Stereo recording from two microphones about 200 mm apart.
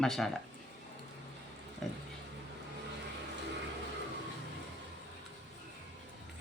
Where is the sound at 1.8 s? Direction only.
Centre (ahead or behind).